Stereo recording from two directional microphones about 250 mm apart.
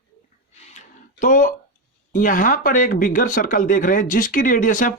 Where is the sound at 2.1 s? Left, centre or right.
Left.